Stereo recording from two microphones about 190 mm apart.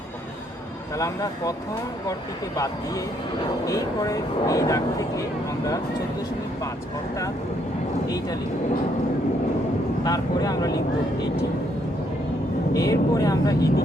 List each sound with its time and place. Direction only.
0.9 s speech: 20° left (ahead or behind)
3.7 s speech: 20° left (ahead or behind)
10.0 s speech: 20° left (ahead or behind)
12.7 s speech: 20° left (ahead or behind)